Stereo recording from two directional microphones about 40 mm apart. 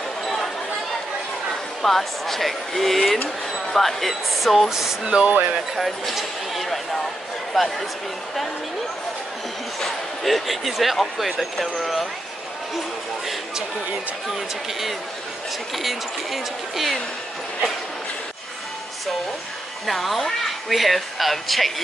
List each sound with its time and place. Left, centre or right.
1.8 s speech: centre
4.6 s speech: centre
5.0 s speech: right
5.8 s speech: centre
9.8 s speech: centre
14.3 s speech: centre
19.9 s speech: centre